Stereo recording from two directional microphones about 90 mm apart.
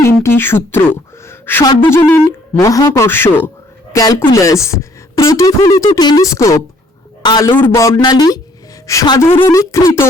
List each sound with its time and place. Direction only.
0.0 s speech: 30° left (ahead or behind)
2.6 s speech: 40° left (ahead or behind)
3.1 s speech: 25° left (ahead or behind)
3.9 s speech: 40° left (ahead or behind)
6.2 s speech: 35° left (ahead or behind)
7.2 s a man's voice: 45° left (ahead or behind)
7.5 s speech: 20° left (ahead or behind)
8.0 s speech: 50° left (ahead or behind)
8.9 s speech: 35° left (ahead or behind)
9.2 s speech: 25° left (ahead or behind)